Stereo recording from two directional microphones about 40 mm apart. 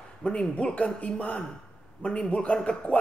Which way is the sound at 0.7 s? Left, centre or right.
Left.